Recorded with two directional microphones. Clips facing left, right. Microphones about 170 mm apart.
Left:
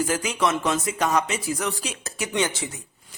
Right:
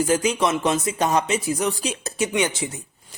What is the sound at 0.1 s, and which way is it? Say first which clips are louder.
Speech: right 3 dB; 20° right (ahead or behind).